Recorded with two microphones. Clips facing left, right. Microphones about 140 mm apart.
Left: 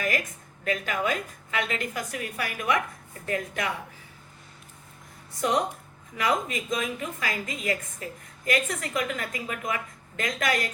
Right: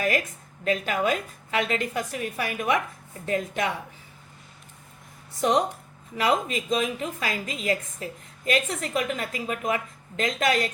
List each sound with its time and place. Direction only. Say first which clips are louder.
0.6 s a woman's voice: right 3 dB; 30° right (ahead or behind)
6.1 s a woman's voice: right 3 dB; 25° right (ahead or behind)